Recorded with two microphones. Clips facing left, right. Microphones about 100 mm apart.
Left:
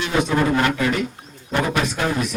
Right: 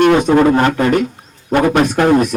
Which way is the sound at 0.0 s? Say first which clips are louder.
Right 10 dB; 55° right (ahead or behind).